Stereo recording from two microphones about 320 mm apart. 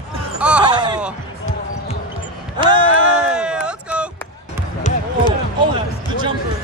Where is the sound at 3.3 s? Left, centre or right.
Centre.